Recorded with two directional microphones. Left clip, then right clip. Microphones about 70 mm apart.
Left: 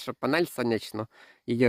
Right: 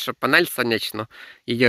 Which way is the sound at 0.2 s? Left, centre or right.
Centre.